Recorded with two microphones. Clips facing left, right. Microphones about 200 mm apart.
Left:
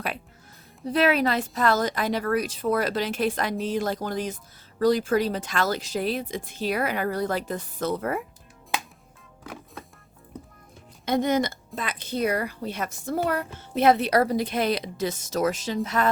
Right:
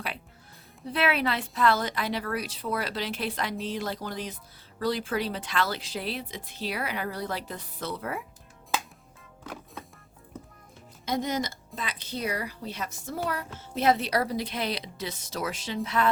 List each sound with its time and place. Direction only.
0.9 s speech: 40° left (ahead or behind)
11.0 s speech: 60° left (ahead or behind); by 16.0 s 45° left (ahead or behind)